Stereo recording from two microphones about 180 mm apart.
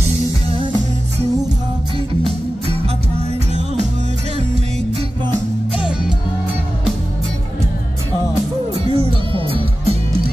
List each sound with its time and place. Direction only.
2.2 s music: 35° right (ahead or behind)
8.7 s music: 30° right (ahead or behind)